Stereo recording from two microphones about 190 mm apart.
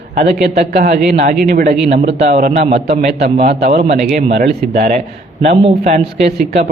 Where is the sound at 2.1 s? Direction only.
65° right (ahead or behind).